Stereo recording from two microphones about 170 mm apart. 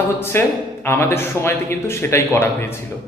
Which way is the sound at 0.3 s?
15° left (ahead or behind).